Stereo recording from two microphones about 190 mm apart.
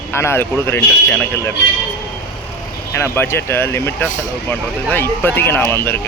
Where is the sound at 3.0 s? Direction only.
10° left (ahead or behind).